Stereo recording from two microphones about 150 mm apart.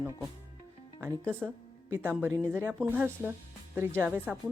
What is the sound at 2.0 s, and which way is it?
Speech, 10° right (ahead or behind).